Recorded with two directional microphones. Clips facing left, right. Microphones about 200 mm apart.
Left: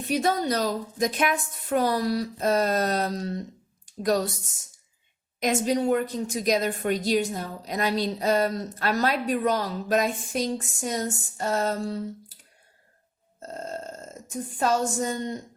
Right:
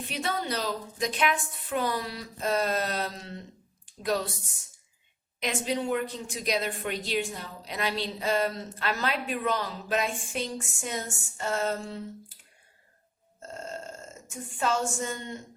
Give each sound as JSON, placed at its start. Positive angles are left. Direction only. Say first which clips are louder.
{"t": 0.1, "sound": "a woman's voice", "louder": "left 8 dB", "side_deg": 45}
{"t": 5.4, "sound": "a woman's voice", "louder": "left 6 dB", "side_deg": 45}
{"t": 13.4, "sound": "burping", "louder": "left 4 dB", "side_deg": 40}